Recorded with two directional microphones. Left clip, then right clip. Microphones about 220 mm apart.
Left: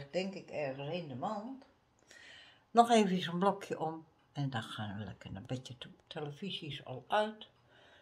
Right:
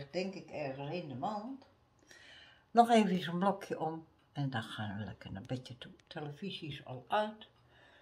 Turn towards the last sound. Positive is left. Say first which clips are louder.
# left 1 dB
turn(degrees=25)  # may be behind; listen again after turning